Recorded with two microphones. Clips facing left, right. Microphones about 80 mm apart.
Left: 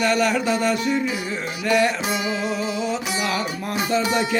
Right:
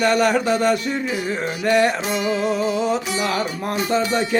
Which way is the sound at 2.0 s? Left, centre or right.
Centre.